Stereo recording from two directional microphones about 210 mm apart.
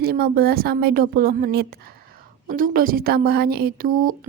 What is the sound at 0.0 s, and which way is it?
A woman's voice, 45° right (ahead or behind).